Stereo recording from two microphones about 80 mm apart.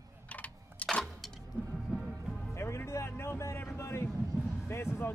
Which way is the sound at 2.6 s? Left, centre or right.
Left.